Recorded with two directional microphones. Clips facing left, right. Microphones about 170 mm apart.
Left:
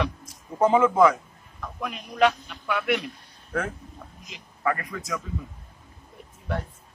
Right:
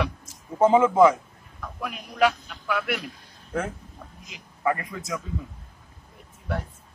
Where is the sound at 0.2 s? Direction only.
25° right (ahead or behind).